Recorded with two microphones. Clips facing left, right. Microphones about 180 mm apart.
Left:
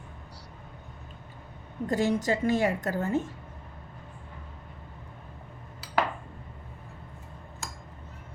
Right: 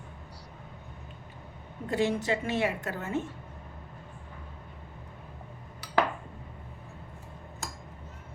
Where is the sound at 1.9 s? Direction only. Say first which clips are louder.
Left 2 dB; 40° left (ahead or behind).